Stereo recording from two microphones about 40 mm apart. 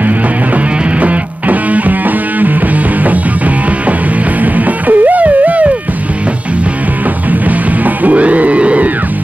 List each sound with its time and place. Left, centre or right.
1.0 s music: right
4.6 s music: right
7.2 s music: right